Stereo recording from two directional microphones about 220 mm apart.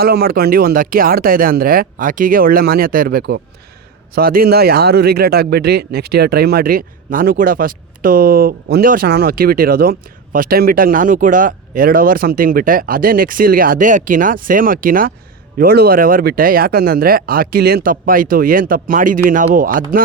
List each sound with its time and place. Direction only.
0.0 s a man's voice: 45° right (ahead or behind)